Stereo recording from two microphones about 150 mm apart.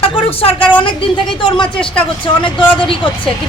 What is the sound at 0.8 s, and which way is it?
A woman's voice, 35° left (ahead or behind).